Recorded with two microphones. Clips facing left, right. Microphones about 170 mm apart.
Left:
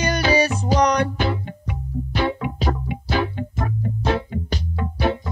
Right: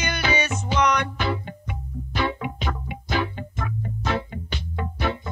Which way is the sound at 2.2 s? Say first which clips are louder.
Left 3 dB; 35° left (ahead or behind).